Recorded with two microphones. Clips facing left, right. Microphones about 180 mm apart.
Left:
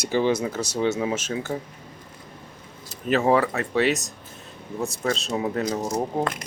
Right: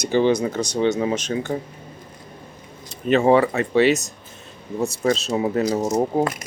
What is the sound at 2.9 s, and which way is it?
Speech, 5° left (ahead or behind).